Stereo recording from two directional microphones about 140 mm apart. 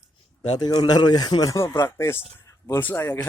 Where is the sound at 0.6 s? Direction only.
30° left (ahead or behind).